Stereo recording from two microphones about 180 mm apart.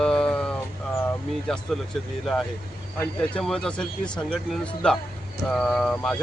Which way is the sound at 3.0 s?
5° left (ahead or behind).